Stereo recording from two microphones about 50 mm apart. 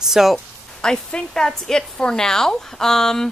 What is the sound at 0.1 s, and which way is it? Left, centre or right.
Speech, centre.